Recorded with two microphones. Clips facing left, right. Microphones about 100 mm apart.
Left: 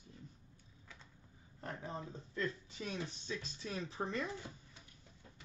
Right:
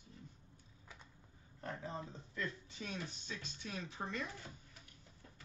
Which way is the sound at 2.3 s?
25° left (ahead or behind).